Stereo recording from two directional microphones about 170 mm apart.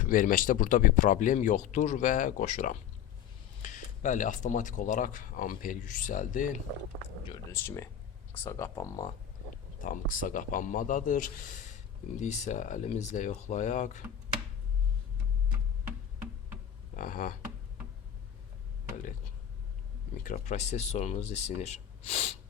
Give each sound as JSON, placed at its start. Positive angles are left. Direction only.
{"t": 0.0, "sound": "speech", "side_deg": 55}
{"t": 7.5, "sound": "speech", "side_deg": 15}
{"t": 9.8, "sound": "speech", "side_deg": 50}
{"t": 17.0, "sound": "a sound", "side_deg": 55}
{"t": 20.2, "sound": "speech", "side_deg": 45}